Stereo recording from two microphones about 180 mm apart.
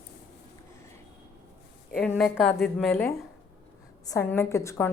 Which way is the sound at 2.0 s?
Centre (ahead or behind).